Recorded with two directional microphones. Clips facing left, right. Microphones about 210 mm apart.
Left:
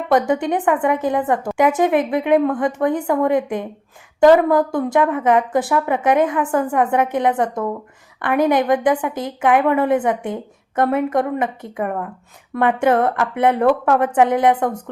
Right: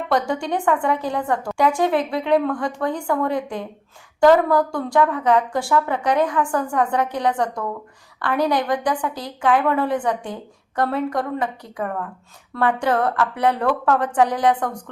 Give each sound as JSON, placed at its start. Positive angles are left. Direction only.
{"t": 0.1, "sound": "a woman's voice", "side_deg": 20}